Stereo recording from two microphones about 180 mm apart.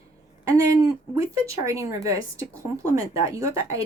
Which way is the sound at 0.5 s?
15° right (ahead or behind).